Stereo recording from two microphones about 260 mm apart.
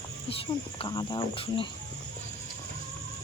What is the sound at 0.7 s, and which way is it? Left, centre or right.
Speech, centre.